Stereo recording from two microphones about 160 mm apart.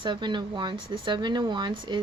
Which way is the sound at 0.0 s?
30° right (ahead or behind).